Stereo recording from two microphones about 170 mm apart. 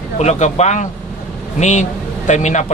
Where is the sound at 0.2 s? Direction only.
40° left (ahead or behind).